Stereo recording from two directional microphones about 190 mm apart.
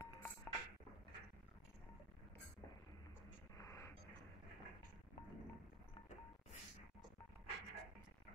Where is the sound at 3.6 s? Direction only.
15° left (ahead or behind).